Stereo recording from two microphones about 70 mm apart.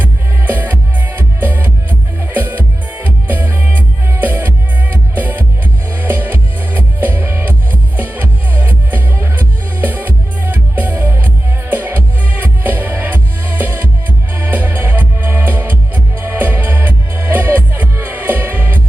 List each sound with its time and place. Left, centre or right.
0.0 s music: right